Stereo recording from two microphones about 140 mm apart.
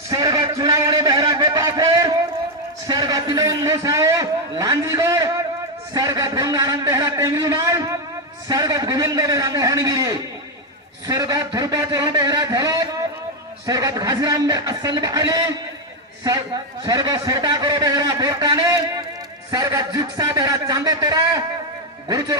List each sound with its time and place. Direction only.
0.1 s a sound: 25° right (ahead or behind)
2.8 s a man's voice: 25° right (ahead or behind)
16.8 s a man's voice: 30° right (ahead or behind)